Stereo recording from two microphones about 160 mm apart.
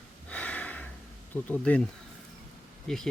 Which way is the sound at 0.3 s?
10° left (ahead or behind).